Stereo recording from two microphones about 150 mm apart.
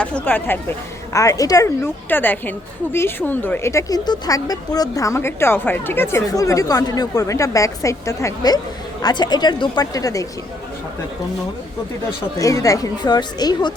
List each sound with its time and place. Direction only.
0.0 s speech: 10° left (ahead or behind)
12.4 s speech: 20° left (ahead or behind)